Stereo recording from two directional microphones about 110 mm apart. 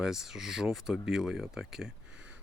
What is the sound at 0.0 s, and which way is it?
Speech, 5° right (ahead or behind).